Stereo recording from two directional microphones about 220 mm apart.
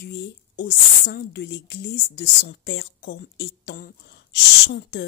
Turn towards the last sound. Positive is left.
turn(degrees=50)  # may be behind; listen again after turning